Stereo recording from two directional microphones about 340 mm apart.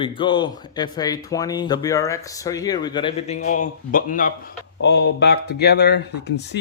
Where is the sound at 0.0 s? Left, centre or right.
Centre.